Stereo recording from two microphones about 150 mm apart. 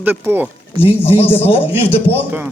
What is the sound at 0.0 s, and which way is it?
Speech, 10° right (ahead or behind).